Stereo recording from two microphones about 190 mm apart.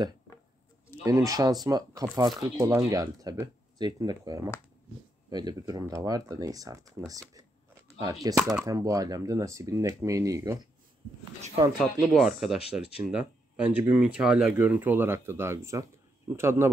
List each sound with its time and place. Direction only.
1.0 s speech: 15° right (ahead or behind)
11.8 s speech: centre (ahead or behind)